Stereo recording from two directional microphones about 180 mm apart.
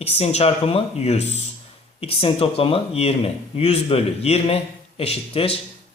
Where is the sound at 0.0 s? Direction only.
35° left (ahead or behind).